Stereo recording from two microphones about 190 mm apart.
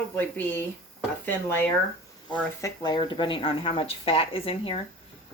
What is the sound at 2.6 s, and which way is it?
A woman's voice, 20° left (ahead or behind).